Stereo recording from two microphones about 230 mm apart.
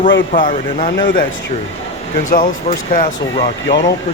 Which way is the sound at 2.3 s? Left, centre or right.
Left.